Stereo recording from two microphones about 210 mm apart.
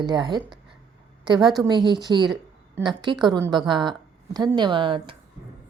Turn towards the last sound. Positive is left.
turn(degrees=-25)  # may be behind; listen again after turning